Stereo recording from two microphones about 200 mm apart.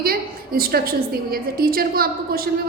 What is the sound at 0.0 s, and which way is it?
A woman's voice, 50° right (ahead or behind).